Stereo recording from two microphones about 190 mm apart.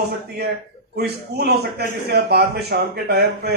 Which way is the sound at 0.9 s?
60° right (ahead or behind).